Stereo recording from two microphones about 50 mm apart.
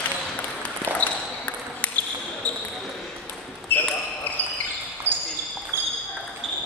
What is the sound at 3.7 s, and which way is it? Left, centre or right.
Basketball bounce, left.